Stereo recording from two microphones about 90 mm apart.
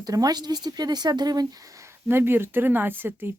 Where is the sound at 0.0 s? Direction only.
45° right (ahead or behind).